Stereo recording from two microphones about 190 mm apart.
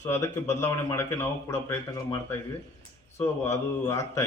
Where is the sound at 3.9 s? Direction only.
15° left (ahead or behind).